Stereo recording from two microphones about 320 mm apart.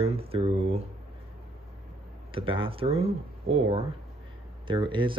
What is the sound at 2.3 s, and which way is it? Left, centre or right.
Speech, centre.